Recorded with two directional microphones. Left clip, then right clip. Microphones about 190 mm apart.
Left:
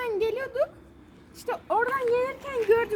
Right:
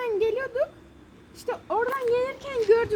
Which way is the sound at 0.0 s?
5° left (ahead or behind).